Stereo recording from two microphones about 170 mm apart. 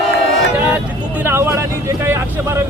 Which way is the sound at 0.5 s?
10° right (ahead or behind).